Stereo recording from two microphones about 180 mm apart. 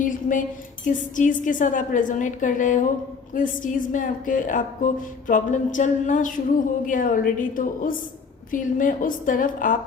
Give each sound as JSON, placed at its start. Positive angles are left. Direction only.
{"t": 0.0, "sound": "a woman's voice", "side_deg": 50}